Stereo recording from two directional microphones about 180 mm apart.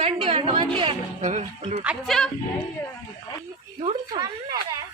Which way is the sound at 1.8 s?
Centre (ahead or behind).